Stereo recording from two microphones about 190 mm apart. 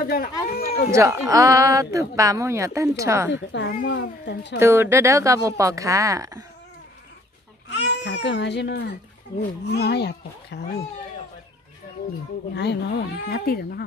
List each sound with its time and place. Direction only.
0.0 s a sound: 50° left (ahead or behind)
0.9 s speech: 15° right (ahead or behind)
3.3 s speech: 70° left (ahead or behind)
4.6 s speech: 15° right (ahead or behind)
7.7 s speech: 65° left (ahead or behind)
12.5 s speech: 60° left (ahead or behind)